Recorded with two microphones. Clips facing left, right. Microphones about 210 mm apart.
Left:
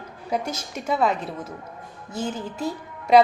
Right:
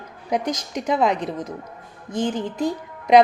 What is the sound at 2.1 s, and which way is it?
Music, 5° left (ahead or behind).